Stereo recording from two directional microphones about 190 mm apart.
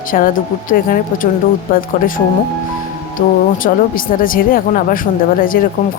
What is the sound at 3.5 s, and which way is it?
Speech, 45° left (ahead or behind).